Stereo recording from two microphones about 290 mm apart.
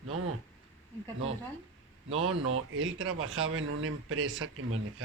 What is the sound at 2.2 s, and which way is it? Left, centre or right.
Speech, right.